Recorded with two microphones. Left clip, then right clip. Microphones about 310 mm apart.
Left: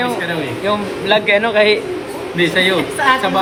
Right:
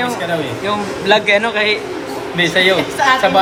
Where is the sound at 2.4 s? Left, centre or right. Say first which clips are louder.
Right 1 dB; centre.